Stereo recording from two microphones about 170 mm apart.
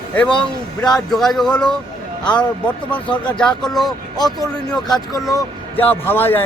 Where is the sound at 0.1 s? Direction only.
5° left (ahead or behind).